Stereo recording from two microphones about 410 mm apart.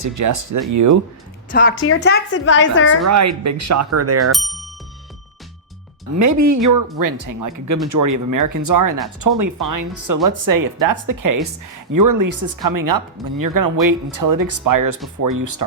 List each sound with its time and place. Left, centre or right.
0.0 s speech: right
1.5 s a woman's voice: left
3.1 s speech: right
4.3 s speech: centre
6.1 s speech: right